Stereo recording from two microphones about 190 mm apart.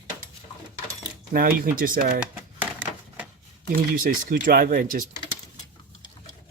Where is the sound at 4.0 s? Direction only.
45° right (ahead or behind).